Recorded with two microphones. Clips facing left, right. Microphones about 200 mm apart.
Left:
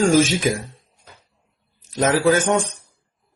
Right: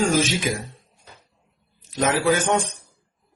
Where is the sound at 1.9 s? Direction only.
40° left (ahead or behind).